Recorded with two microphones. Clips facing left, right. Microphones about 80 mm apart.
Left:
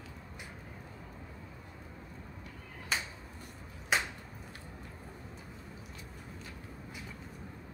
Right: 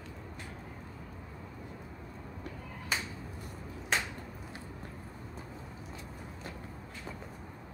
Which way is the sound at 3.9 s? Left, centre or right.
Centre.